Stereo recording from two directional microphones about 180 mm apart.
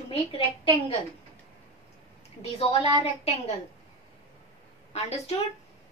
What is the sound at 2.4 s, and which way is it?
Speech, 35° left (ahead or behind).